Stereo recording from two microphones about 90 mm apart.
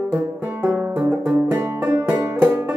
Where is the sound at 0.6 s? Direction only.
10° right (ahead or behind).